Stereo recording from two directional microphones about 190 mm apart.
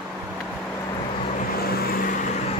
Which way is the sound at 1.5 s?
55° left (ahead or behind).